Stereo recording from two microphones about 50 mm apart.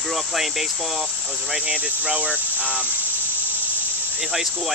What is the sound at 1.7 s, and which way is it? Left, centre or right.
Speech, right.